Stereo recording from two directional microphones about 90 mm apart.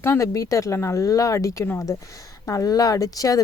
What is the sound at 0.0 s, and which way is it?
Speech, 35° left (ahead or behind).